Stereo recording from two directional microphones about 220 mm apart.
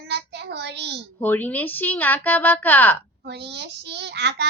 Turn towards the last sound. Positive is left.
turn(degrees=-50)  # may be behind; listen again after turning